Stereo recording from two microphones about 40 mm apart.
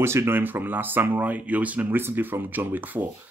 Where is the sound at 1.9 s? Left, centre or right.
Right.